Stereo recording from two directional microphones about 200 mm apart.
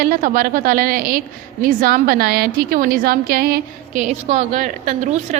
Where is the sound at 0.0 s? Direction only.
45° right (ahead or behind).